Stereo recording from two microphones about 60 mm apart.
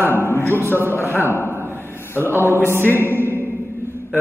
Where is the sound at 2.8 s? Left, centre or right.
Left.